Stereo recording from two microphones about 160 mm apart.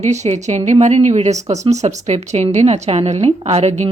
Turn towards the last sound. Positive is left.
turn(degrees=-45)  # may be behind; listen again after turning